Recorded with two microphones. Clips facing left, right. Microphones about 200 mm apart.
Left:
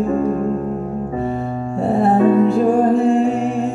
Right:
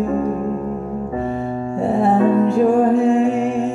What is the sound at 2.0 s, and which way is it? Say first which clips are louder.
Music: left 2 dB; centre (ahead or behind).